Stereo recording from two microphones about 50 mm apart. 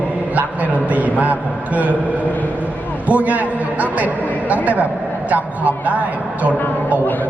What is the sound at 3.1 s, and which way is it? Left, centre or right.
A man's voice, right.